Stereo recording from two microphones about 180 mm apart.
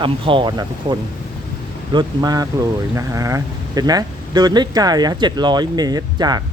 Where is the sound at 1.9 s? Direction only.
20° right (ahead or behind).